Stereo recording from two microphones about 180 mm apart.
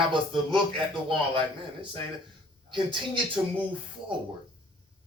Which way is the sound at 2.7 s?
25° right (ahead or behind).